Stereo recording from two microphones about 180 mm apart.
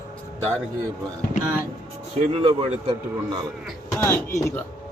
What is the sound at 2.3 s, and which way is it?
A man's voice, 30° right (ahead or behind).